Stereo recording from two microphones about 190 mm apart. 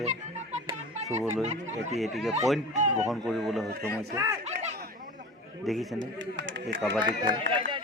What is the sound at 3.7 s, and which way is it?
Speech, 55° right (ahead or behind).